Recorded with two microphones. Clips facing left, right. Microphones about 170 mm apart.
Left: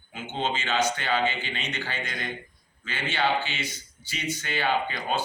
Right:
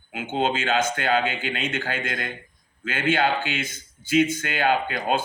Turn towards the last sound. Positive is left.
turn(degrees=-50)  # may be behind; listen again after turning